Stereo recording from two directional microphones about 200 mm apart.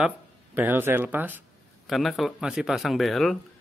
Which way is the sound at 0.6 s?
10° right (ahead or behind).